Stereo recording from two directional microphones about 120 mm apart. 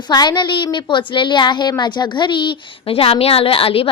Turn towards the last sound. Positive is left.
turn(degrees=50)  # may be behind; listen again after turning